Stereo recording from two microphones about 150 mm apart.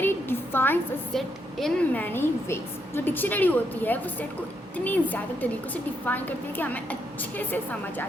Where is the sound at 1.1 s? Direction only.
5° left (ahead or behind).